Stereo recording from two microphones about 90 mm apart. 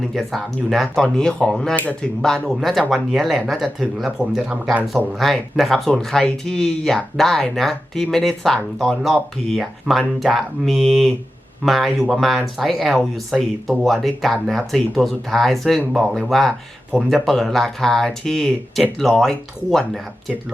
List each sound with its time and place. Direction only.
0.0 s speech: centre (ahead or behind); by 2.0 s 15° left (ahead or behind)
2.6 s speech: centre (ahead or behind)
5.2 s speech: centre (ahead or behind)